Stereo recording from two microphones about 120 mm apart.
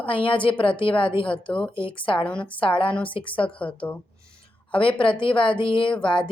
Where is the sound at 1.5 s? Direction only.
10° left (ahead or behind).